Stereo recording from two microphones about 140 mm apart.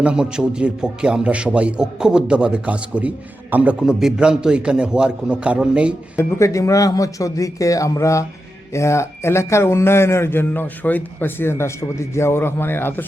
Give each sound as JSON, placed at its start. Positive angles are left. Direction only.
{"t": 0.0, "sound": "a man's voice", "side_deg": -5}
{"t": 6.1, "sound": "speech", "side_deg": 20}